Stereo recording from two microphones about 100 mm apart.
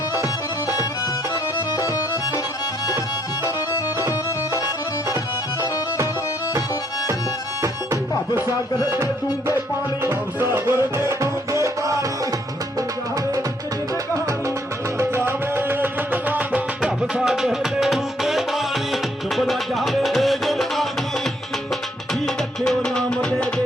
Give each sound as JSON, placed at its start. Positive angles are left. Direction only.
{"t": 10.0, "sound": "music", "side_deg": -20}
{"t": 14.9, "sound": "music", "side_deg": -25}
{"t": 17.2, "sound": "music", "side_deg": -5}
{"t": 22.6, "sound": "music", "side_deg": 5}